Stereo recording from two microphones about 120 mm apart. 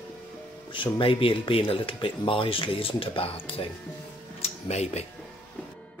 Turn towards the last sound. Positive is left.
turn(degrees=65)  # may be behind; listen again after turning